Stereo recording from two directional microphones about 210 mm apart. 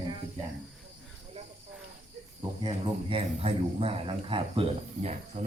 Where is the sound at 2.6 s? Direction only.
25° right (ahead or behind).